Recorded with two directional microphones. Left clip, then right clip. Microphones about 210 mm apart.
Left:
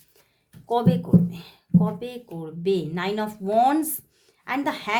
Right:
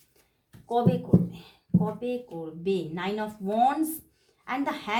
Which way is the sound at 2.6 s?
50° left (ahead or behind).